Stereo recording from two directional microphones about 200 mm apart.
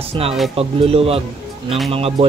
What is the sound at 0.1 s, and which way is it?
Speech, 30° right (ahead or behind).